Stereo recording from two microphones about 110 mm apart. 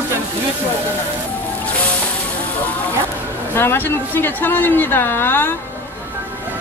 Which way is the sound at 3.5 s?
20° left (ahead or behind).